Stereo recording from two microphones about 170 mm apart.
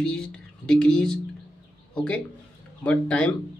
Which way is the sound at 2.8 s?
5° left (ahead or behind).